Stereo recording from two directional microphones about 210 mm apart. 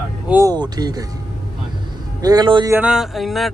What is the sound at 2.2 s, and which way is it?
Speech, 20° right (ahead or behind).